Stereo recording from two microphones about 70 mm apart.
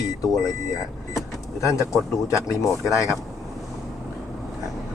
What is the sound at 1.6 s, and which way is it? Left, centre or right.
Speech, left.